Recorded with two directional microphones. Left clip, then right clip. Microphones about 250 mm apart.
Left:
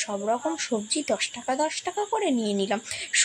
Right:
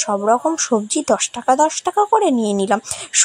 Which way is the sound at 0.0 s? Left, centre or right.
Right.